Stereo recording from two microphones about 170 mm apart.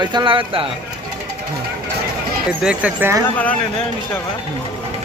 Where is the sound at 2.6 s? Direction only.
5° right (ahead or behind).